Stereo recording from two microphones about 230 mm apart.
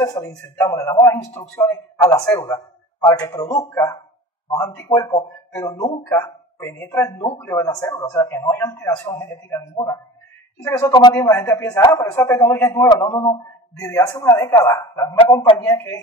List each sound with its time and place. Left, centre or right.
0.0 s a man's voice: centre
10.8 s a man's voice: centre